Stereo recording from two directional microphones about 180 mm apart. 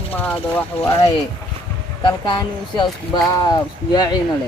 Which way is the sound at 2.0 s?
25° left (ahead or behind).